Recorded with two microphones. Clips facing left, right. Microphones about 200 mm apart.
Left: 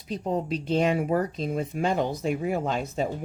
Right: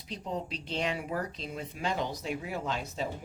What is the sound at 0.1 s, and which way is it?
Speech, 50° left (ahead or behind).